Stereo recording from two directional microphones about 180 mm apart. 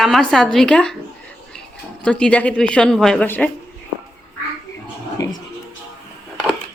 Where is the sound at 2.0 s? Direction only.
5° left (ahead or behind).